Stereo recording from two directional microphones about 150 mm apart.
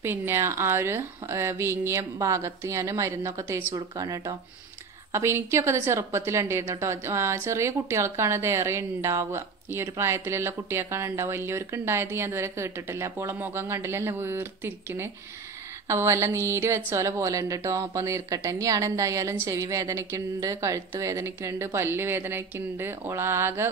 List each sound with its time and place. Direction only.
0.0 s a woman's voice: 15° right (ahead or behind)